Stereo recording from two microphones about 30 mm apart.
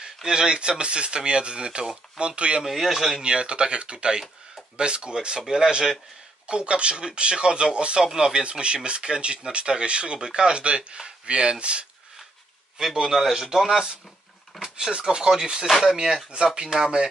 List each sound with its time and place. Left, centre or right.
0.0 s speech: right
2.6 s a man's voice: centre
3.2 s speech: right
8.0 s speech: right
10.1 s speech: right
10.5 s speech: right
12.7 s a man's voice: centre
14.6 s a man's voice: right